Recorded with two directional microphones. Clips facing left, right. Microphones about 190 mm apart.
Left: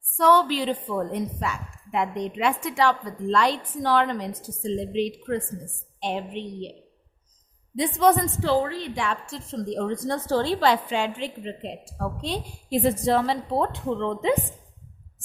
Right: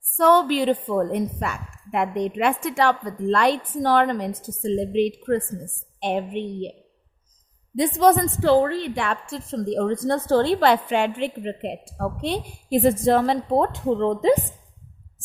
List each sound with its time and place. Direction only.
0.2 s a woman's voice: 50° right (ahead or behind)
7.8 s a woman's voice: 40° right (ahead or behind)
8.4 s a woman's voice: 55° right (ahead or behind); by 14.3 s 40° right (ahead or behind)